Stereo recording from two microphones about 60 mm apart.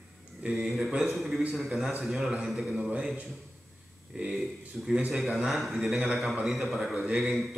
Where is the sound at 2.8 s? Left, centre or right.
Centre.